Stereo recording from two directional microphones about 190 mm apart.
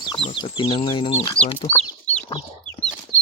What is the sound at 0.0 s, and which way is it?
Speech, 25° left (ahead or behind).